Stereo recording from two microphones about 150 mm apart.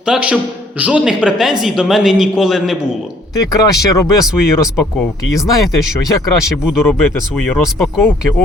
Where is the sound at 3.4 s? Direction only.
25° left (ahead or behind).